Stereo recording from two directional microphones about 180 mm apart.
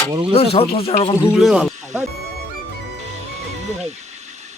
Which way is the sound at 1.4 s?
Centre (ahead or behind).